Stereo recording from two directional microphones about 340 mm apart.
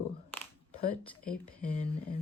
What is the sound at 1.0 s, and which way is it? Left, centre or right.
Speech, centre.